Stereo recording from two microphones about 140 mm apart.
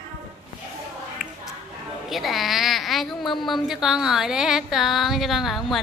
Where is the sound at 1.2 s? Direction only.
Centre (ahead or behind).